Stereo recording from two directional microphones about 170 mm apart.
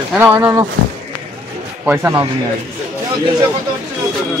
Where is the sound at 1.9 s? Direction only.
10° right (ahead or behind).